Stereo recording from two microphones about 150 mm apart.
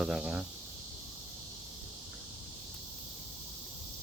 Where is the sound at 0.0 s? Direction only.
5° right (ahead or behind).